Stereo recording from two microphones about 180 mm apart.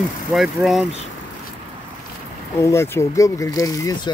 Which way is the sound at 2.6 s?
15° left (ahead or behind).